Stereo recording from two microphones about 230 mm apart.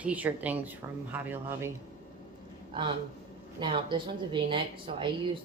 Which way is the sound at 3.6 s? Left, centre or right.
Right.